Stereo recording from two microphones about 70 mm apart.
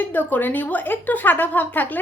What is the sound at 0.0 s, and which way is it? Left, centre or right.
A woman's voice, left.